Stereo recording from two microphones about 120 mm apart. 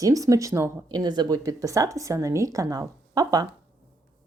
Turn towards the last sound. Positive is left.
turn(degrees=-30)  # may be behind; listen again after turning